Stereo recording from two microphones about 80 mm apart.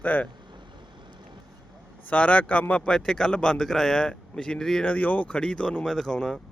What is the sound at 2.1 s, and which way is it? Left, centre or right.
A man's voice, centre.